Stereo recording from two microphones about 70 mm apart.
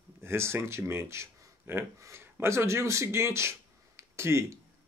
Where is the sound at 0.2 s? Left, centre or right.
Right.